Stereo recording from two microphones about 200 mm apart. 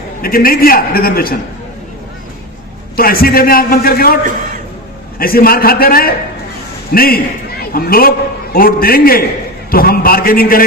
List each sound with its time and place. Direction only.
0.2 s a man's voice: 45° left (ahead or behind)
2.9 s a man's voice: 50° left (ahead or behind)
5.2 s a man's voice: 45° left (ahead or behind)